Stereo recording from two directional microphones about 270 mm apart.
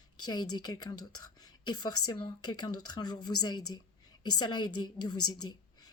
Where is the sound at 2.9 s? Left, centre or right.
Centre.